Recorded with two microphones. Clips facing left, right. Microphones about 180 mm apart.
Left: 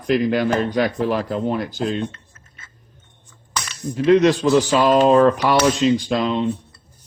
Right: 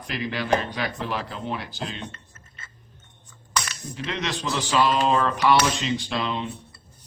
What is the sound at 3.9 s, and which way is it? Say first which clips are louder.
Speech: left 16 dB; 45° left (ahead or behind).